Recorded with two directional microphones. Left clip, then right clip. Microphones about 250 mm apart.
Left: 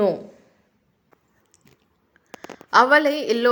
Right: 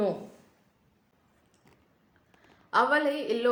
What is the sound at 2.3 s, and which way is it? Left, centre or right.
A woman's voice, left.